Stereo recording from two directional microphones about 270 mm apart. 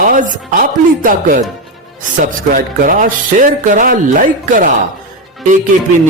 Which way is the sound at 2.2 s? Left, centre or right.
Right.